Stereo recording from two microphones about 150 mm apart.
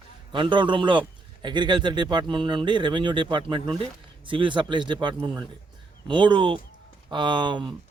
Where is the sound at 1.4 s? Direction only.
30° right (ahead or behind).